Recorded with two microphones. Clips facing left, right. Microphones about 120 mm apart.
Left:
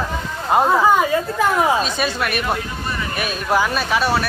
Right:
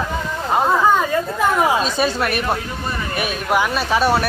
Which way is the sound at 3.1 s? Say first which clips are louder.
Even; 20° right (ahead or behind).